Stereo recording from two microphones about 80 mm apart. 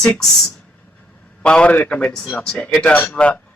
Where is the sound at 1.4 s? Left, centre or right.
Centre.